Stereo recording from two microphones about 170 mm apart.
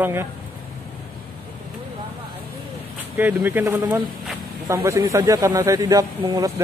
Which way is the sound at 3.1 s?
10° right (ahead or behind).